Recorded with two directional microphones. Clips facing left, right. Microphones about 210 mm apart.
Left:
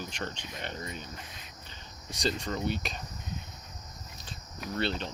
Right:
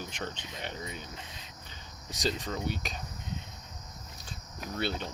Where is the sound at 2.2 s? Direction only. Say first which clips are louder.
Left 1 dB; 5° right (ahead or behind).